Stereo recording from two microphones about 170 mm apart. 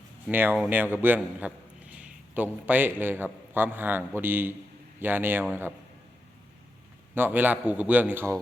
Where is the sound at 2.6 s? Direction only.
10° right (ahead or behind).